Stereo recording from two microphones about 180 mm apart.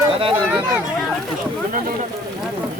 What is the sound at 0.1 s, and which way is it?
Speech, 30° right (ahead or behind).